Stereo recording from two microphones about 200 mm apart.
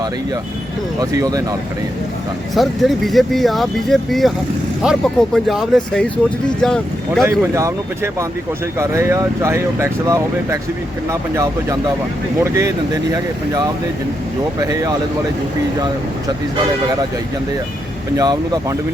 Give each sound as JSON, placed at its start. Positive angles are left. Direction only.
{"t": 0.9, "sound": "speech", "side_deg": -20}
{"t": 2.6, "sound": "speech", "side_deg": 0}
{"t": 7.3, "sound": "speech", "side_deg": -15}
{"t": 18.2, "sound": "speech", "side_deg": -20}